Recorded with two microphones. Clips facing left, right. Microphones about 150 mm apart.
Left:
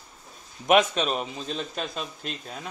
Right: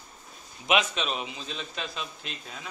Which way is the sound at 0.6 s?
45° left (ahead or behind).